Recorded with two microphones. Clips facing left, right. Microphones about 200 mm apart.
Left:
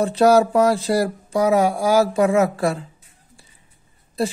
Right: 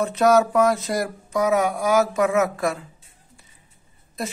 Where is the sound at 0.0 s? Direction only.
30° left (ahead or behind).